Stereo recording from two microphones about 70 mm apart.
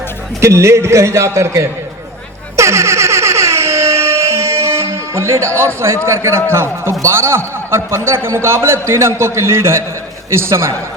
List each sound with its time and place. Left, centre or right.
0.4 s a man's voice: right
2.6 s a sound: right
6.1 s a man's voice: right